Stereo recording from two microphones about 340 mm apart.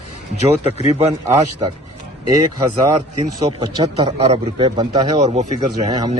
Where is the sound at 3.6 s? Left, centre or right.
Centre.